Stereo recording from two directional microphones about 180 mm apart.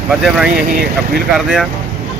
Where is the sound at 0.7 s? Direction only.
55° right (ahead or behind).